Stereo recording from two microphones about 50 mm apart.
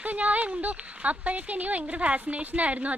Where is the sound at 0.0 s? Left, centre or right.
Right.